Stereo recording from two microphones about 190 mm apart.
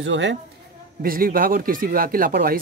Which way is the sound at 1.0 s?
50° right (ahead or behind).